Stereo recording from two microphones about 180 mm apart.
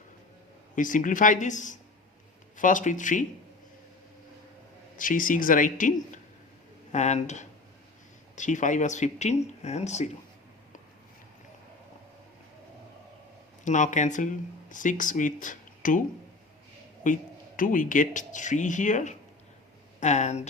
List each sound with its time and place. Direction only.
0.8 s speech: 45° left (ahead or behind)
4.9 s speech: 50° left (ahead or behind)
13.7 s speech: 45° left (ahead or behind)
17.0 s speech: 45° left (ahead or behind)